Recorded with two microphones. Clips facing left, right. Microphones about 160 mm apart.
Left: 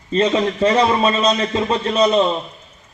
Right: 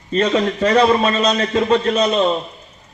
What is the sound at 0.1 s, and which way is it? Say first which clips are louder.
A man's voice: even; 25° left (ahead or behind).